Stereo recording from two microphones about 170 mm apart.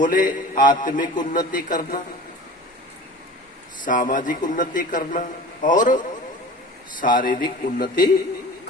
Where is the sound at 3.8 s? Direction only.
50° left (ahead or behind).